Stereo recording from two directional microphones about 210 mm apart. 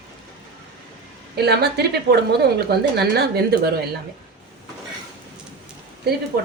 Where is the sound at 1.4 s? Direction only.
50° right (ahead or behind).